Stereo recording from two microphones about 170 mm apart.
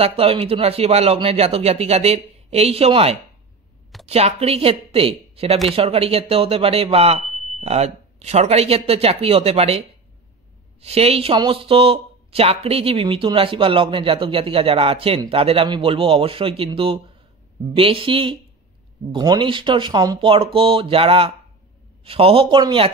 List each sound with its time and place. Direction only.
0.0 s speech: 35° right (ahead or behind)